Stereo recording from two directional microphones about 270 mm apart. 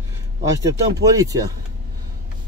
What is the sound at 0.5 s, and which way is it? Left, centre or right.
Speech, centre.